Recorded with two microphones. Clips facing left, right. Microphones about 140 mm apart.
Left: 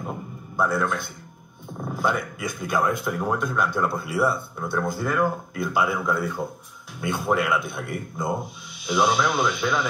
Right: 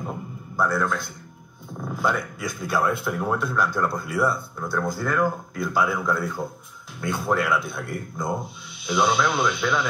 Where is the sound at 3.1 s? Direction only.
10° left (ahead or behind).